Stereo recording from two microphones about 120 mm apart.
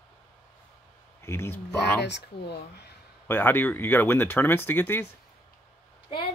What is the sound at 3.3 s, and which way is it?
Speech, 20° left (ahead or behind).